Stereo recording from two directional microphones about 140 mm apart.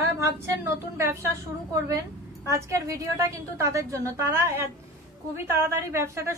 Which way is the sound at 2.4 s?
20° right (ahead or behind).